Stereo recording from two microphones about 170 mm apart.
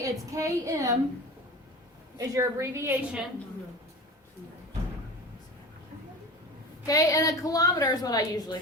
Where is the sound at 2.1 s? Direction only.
20° right (ahead or behind).